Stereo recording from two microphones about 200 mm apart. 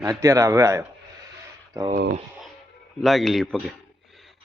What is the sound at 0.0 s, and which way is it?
Speech, 15° right (ahead or behind).